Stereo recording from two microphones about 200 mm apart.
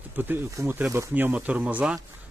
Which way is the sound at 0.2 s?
10° right (ahead or behind).